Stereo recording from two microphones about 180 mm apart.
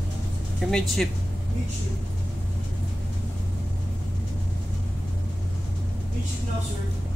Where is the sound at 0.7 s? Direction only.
Centre (ahead or behind).